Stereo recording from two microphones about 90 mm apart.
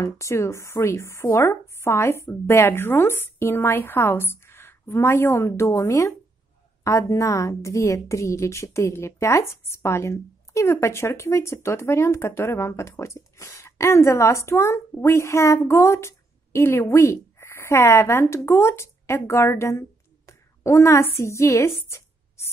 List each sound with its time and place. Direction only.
0.0 s a woman's voice: 35° left (ahead or behind)